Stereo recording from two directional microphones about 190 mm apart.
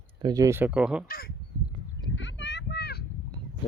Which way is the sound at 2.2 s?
70° left (ahead or behind).